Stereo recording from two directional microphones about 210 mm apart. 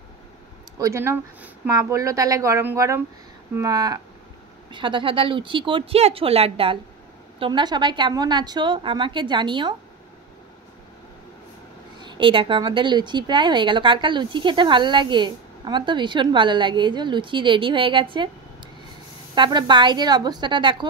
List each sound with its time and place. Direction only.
0.7 s a woman's voice: 15° right (ahead or behind)
12.0 s a woman's voice: 20° right (ahead or behind)
19.3 s a woman's voice: 20° right (ahead or behind)